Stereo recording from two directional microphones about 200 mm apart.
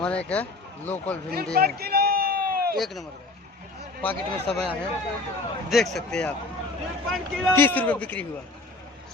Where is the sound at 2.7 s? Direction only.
Centre (ahead or behind).